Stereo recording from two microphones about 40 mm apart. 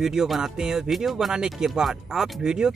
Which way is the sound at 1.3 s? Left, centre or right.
Centre.